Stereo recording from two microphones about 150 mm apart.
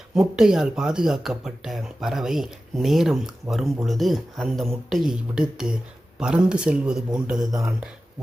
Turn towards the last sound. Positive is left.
turn(degrees=-5)  # may be behind; listen again after turning